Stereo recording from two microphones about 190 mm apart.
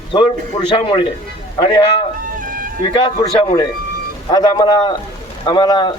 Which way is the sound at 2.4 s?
45° right (ahead or behind).